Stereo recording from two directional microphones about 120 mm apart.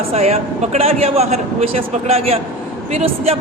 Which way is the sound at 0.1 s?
65° right (ahead or behind).